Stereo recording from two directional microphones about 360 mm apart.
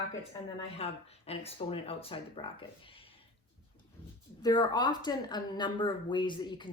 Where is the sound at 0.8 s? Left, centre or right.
Centre.